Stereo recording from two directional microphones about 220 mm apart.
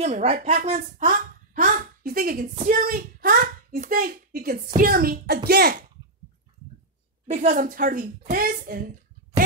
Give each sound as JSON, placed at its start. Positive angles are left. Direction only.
{"t": 0.0, "sound": "a woman's voice", "side_deg": -30}
{"t": 7.2, "sound": "a woman's voice", "side_deg": -35}